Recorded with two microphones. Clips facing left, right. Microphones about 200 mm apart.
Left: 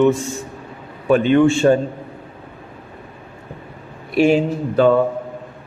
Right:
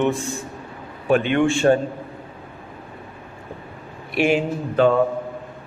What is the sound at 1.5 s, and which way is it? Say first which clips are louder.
Speech: left 3 dB; 40° left (ahead or behind).